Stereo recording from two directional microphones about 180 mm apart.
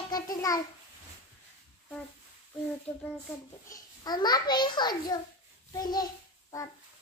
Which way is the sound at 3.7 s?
20° left (ahead or behind).